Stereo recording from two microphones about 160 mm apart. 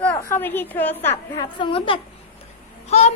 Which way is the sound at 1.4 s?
30° left (ahead or behind).